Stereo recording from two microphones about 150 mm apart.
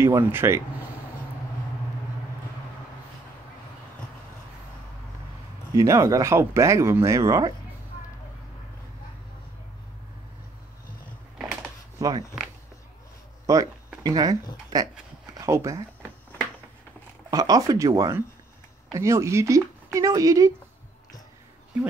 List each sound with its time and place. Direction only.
0.0 s speech: 15° right (ahead or behind)
5.8 s speech: 20° right (ahead or behind)
13.5 s speech: 20° right (ahead or behind)
16.0 s a sound: 10° left (ahead or behind)
17.3 s speech: 25° right (ahead or behind)